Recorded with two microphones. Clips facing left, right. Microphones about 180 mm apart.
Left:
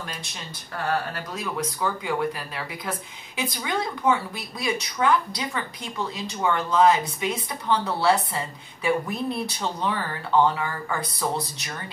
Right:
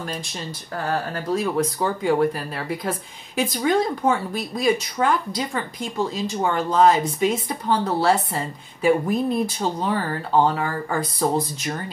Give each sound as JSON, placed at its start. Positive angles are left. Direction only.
{"t": 0.8, "sound": "a woman's voice", "side_deg": -40}